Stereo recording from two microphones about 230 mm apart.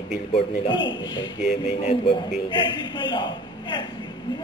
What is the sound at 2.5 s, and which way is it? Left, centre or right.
Speech, centre.